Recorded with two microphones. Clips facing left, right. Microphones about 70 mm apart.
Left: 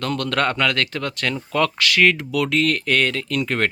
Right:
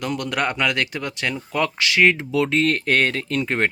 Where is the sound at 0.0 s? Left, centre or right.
Centre.